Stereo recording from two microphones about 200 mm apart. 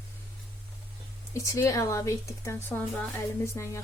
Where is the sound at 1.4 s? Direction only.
15° left (ahead or behind).